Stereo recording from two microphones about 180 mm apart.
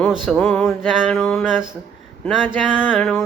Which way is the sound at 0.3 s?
5° left (ahead or behind).